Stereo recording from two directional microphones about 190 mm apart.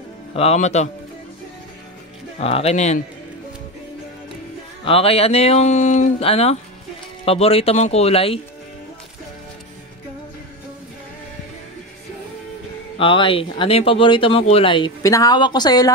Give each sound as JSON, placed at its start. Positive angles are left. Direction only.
{"t": 0.3, "sound": "speech", "side_deg": 30}
{"t": 2.4, "sound": "speech", "side_deg": 35}
{"t": 4.8, "sound": "speech", "side_deg": 30}
{"t": 12.9, "sound": "speech", "side_deg": 25}